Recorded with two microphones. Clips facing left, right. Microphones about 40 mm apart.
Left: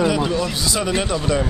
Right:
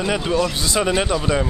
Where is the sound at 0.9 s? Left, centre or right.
Centre.